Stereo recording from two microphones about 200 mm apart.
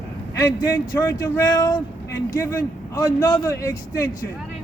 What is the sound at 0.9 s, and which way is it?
Speech, 20° left (ahead or behind).